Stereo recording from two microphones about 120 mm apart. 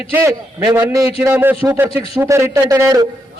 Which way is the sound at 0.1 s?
25° right (ahead or behind).